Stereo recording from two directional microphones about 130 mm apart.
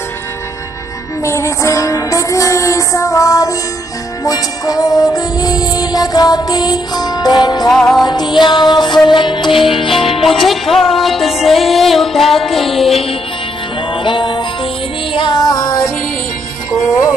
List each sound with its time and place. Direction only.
1.2 s music: 20° left (ahead or behind)
7.7 s music: 5° left (ahead or behind)
8.0 s music: 35° left (ahead or behind)
10.2 s music: centre (ahead or behind)
14.0 s music: 40° left (ahead or behind)